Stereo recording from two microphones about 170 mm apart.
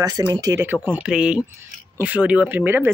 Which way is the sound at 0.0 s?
20° right (ahead or behind).